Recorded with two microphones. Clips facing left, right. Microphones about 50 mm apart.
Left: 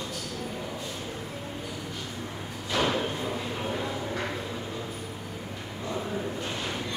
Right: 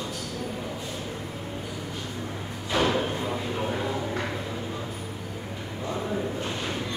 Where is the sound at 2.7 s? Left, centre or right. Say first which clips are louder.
Right 2 dB; centre.